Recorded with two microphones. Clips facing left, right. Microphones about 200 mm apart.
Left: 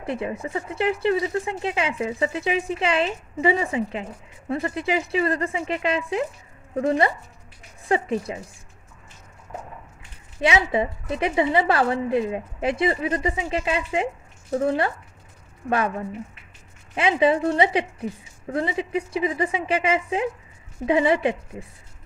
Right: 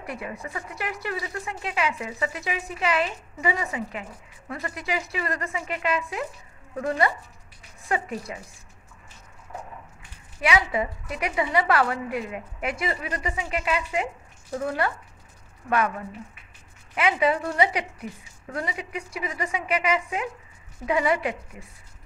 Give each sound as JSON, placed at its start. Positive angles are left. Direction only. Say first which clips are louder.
{"t": 0.0, "sound": "speech", "louder": "left 7 dB", "side_deg": 25}
{"t": 10.4, "sound": "speech", "louder": "left 3 dB", "side_deg": 25}
{"t": 16.9, "sound": "speech", "louder": "left 3 dB", "side_deg": 25}